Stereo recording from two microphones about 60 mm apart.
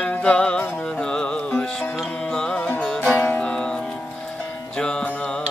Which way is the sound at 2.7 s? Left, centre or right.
Left.